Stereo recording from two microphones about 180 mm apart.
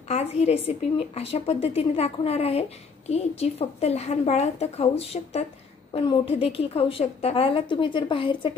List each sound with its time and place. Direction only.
0.1 s a woman's voice: 35° left (ahead or behind)